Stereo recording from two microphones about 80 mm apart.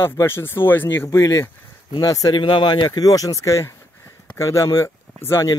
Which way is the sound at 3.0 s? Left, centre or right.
Left.